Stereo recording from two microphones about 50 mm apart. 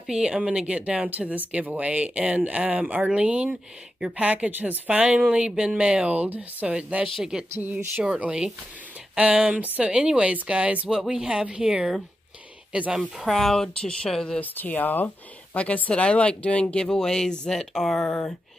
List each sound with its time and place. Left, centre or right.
0.1 s speech: centre
1.1 s speech: right
4.5 s speech: right
7.3 s speech: centre
8.2 s speech: right
10.9 s speech: centre
12.9 s speech: centre
13.3 s speech: centre
14.4 s speech: left
16.8 s speech: centre